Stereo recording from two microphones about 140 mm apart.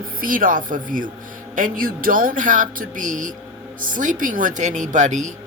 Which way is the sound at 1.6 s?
80° right.